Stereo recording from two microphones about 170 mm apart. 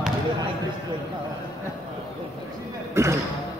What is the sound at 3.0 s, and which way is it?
Basketball bounce, 15° right (ahead or behind).